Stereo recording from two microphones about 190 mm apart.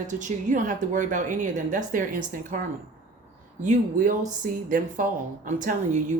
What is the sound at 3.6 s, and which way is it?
Speech, 40° right (ahead or behind).